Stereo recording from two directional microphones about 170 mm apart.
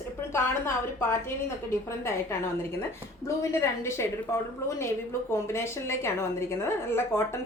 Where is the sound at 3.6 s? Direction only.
15° left (ahead or behind).